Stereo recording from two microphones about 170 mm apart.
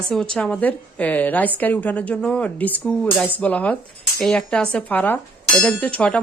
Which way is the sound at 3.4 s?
10° left (ahead or behind).